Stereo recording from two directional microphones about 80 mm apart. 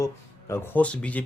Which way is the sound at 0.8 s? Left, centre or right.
Centre.